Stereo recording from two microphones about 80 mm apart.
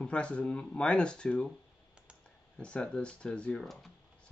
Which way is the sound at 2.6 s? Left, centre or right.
Centre.